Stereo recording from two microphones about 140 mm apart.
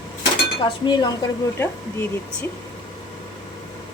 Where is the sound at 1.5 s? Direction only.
15° left (ahead or behind).